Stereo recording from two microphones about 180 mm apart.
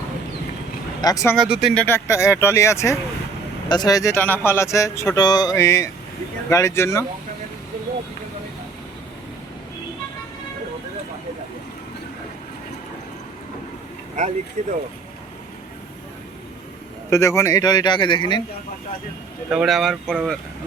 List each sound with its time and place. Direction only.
1.0 s speech: 20° left (ahead or behind)
1.4 s speech: centre (ahead or behind); by 7.0 s 15° left (ahead or behind)
14.6 s speech: 40° right (ahead or behind)
17.1 s a man's voice: 15° left (ahead or behind)
19.5 s speech: 5° right (ahead or behind)